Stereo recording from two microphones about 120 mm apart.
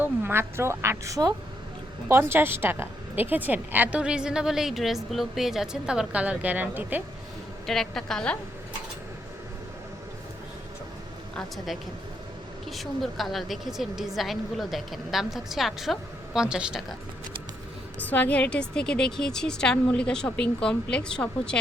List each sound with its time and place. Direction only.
0.0 s a woman's voice: 20° right (ahead or behind)
7.7 s a woman's voice: 5° left (ahead or behind)
11.3 s a woman's voice: centre (ahead or behind)
18.0 s a woman's voice: 15° left (ahead or behind)